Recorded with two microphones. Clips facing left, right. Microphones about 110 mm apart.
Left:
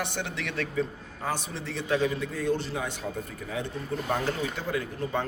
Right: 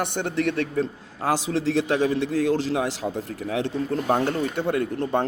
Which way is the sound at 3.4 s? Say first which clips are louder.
Right 8 dB; 80° right.